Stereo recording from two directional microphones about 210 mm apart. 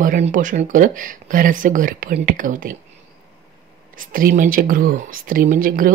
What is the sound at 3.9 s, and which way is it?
Speech, 40° right (ahead or behind).